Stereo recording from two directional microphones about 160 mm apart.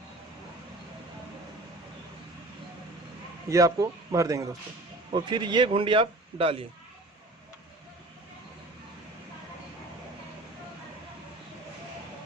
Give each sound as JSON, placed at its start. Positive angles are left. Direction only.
{"t": 3.5, "sound": "a man's voice", "side_deg": -20}